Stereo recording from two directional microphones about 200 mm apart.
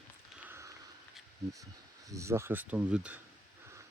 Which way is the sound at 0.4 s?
10° right (ahead or behind).